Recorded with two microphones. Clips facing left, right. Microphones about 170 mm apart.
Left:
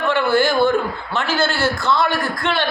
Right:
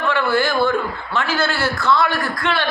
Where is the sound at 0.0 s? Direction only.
25° left (ahead or behind).